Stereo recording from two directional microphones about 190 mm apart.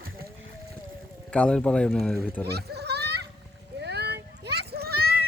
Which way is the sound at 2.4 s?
60° right (ahead or behind).